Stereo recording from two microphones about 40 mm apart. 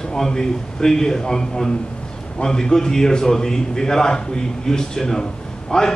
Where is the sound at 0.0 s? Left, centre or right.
Centre.